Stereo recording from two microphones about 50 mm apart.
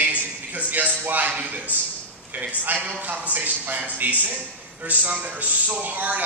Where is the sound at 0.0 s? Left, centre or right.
Right.